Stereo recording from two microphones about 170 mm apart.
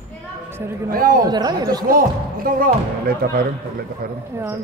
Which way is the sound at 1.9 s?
55° right (ahead or behind).